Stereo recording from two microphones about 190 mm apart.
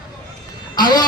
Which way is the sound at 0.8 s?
20° left (ahead or behind).